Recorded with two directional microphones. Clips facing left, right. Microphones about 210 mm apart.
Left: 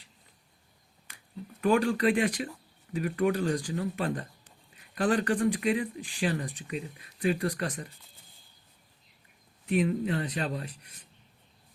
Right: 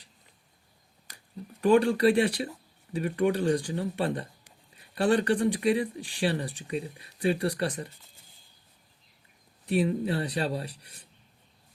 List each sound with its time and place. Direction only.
1.6 s speech: 35° right (ahead or behind)
9.6 s speech: 35° right (ahead or behind)